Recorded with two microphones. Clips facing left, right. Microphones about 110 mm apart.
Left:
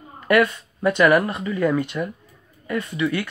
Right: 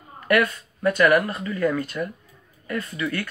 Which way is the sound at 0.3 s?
20° left (ahead or behind).